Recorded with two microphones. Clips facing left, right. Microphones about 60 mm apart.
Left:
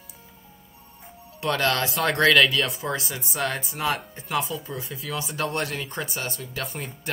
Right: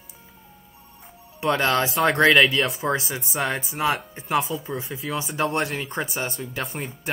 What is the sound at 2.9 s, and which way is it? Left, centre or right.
Speech, right.